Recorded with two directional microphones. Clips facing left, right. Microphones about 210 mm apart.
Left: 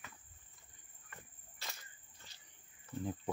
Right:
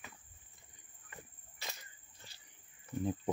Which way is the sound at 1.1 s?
15° right (ahead or behind).